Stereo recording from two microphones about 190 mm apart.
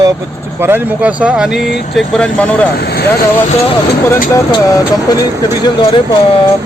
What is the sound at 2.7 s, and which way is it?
Speech, 55° left (ahead or behind).